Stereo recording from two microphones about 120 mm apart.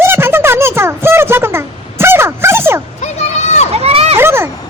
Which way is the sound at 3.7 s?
60° right (ahead or behind).